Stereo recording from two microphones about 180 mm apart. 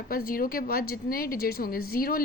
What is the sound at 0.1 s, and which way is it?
A woman's voice, 55° left (ahead or behind).